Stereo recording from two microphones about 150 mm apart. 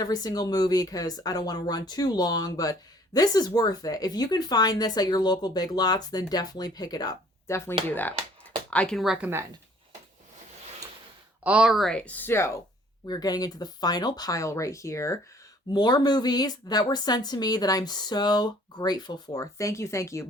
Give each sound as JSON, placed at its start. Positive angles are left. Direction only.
{"t": 0.0, "sound": "speech", "side_deg": 25}
{"t": 11.4, "sound": "speech", "side_deg": -5}